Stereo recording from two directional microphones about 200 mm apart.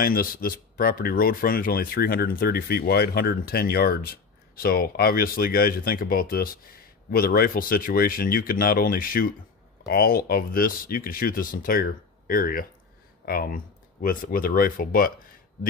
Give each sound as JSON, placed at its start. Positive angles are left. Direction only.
{"t": 0.0, "sound": "speech", "side_deg": 45}